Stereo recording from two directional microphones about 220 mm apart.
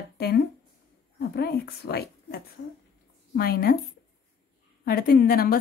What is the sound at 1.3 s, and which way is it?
A woman's voice, 45° left (ahead or behind).